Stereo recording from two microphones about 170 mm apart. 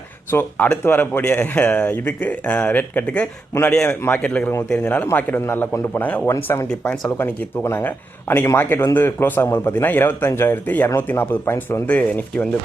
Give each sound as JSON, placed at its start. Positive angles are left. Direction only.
{"t": 0.3, "sound": "a man's voice", "side_deg": 10}